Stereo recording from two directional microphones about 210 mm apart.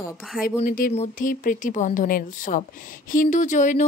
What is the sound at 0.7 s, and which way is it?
Speech, 40° left (ahead or behind).